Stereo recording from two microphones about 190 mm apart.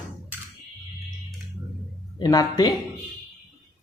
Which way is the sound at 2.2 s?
20° left (ahead or behind).